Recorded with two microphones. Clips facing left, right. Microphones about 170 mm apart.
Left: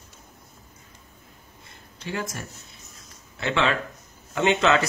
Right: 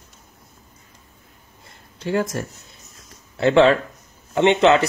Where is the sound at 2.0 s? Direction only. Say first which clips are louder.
Right 9 dB; 45° right (ahead or behind).